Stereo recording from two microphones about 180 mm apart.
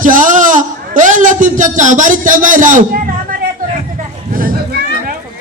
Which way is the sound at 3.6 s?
50° right (ahead or behind).